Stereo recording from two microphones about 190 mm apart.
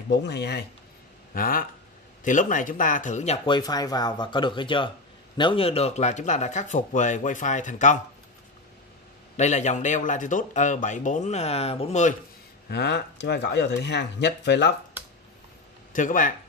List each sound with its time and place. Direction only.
0.1 s speech: 65° left (ahead or behind)
1.3 s speech: 50° left (ahead or behind)
3.4 s speech: 20° left (ahead or behind); by 8.0 s 40° left (ahead or behind)
9.4 s speech: 40° left (ahead or behind)
12.6 s speech: 60° left (ahead or behind)
15.9 s speech: 45° left (ahead or behind)